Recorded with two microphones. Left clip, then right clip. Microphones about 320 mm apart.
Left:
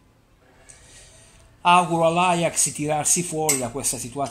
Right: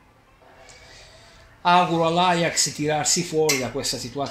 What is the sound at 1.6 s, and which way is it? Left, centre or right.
Speech, centre.